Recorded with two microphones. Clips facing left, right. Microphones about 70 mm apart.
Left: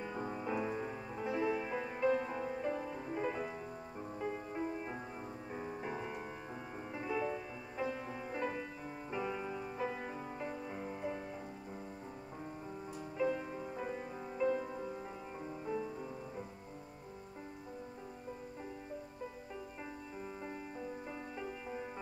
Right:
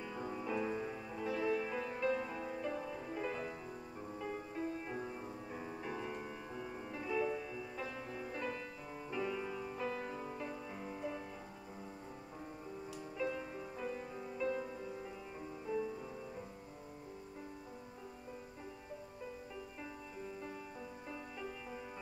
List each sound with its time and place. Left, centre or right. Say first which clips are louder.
0.0 s music: left 2 dB; left
13.2 s music: left 5 dB; centre
21.1 s music: left 2 dB; centre